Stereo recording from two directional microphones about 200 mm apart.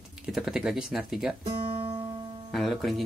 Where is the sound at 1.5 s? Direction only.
30° right (ahead or behind).